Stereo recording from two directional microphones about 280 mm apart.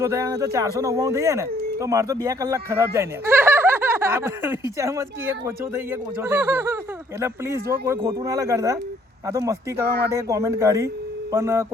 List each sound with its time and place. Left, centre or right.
0.0 s speech: centre
9.8 s speech: right
10.2 s speech: centre